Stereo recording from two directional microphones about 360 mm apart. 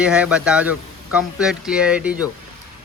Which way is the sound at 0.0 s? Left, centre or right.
Centre.